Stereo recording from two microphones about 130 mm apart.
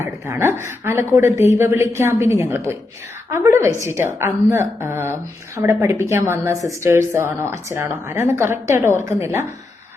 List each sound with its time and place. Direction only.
0.0 s a woman's voice: 20° right (ahead or behind)